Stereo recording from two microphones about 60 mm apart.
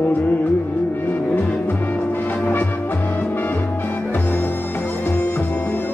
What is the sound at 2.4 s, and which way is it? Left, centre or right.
Music, left.